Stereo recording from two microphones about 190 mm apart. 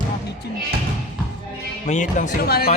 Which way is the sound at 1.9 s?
40° left (ahead or behind).